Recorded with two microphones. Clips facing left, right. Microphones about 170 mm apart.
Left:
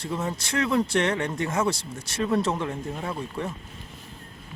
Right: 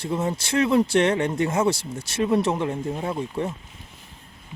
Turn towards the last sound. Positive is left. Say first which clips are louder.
# right 4 dB
turn(degrees=-20)  # may be behind; listen again after turning